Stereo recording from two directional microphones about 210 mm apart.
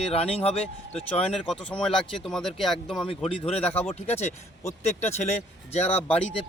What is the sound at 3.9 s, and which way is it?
Speech, 30° left (ahead or behind).